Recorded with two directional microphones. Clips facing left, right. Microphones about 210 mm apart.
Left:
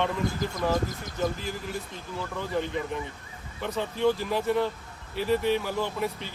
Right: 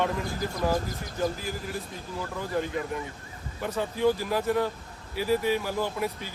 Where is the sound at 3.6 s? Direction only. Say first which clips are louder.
Even; 5° right (ahead or behind).